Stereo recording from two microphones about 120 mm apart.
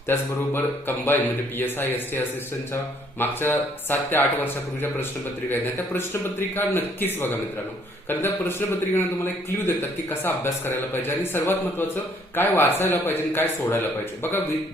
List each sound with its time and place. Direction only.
0.1 s a man's voice: 20° left (ahead or behind)